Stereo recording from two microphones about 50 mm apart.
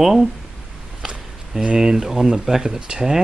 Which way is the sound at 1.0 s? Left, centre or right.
Centre.